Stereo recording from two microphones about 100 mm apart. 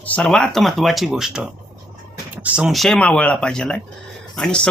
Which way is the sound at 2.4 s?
15° right (ahead or behind).